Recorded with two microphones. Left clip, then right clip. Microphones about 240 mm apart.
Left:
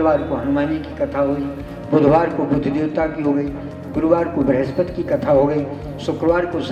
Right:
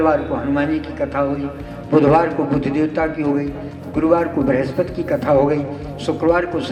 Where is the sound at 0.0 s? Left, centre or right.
Right.